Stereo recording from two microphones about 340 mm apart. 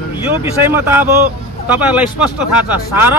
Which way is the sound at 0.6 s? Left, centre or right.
Centre.